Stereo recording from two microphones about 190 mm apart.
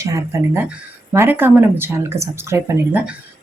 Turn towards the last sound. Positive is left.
turn(degrees=-10)  # may be behind; listen again after turning